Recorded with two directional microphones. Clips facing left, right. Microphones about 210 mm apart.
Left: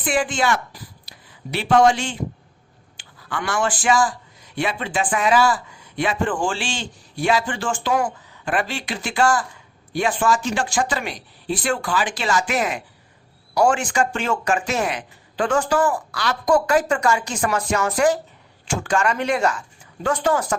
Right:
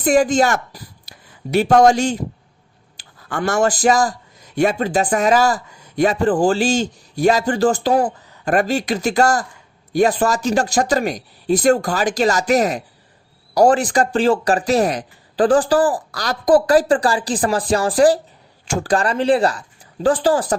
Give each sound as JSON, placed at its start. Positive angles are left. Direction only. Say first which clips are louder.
{"t": 0.0, "sound": "a man's voice", "louder": "right 7 dB", "side_deg": -40}